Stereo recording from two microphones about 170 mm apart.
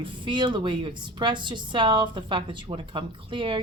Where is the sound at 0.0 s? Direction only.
25° right (ahead or behind).